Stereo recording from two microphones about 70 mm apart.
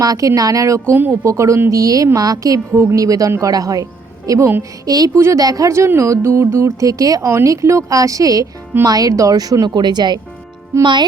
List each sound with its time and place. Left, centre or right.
0.0 s a woman's voice: right
5.7 s speech: right
7.3 s speech: right
10.7 s speech: right